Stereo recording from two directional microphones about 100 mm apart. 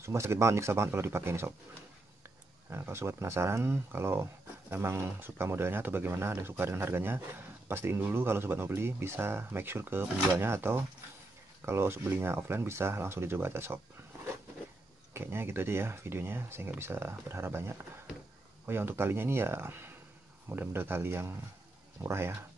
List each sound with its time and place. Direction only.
0.0 s speech: 30° right (ahead or behind)
2.7 s speech: 25° right (ahead or behind)
15.1 s speech: 25° right (ahead or behind)